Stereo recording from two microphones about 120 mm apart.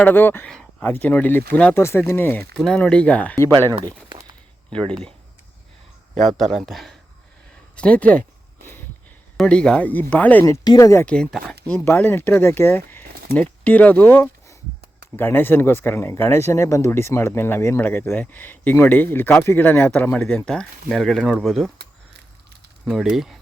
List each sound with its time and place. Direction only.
0.0 s speech: 15° left (ahead or behind)
2.6 s speech: 5° left (ahead or behind)
3.8 s a sound: 35° right (ahead or behind)
6.3 s speech: centre (ahead or behind)
9.4 s speech: 5° left (ahead or behind)
10.4 s speech: 30° left (ahead or behind)
11.0 s speech: 5° left (ahead or behind)
22.9 s speech: 5° right (ahead or behind)